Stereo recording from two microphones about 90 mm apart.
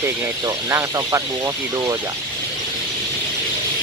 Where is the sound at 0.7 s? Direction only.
35° right (ahead or behind).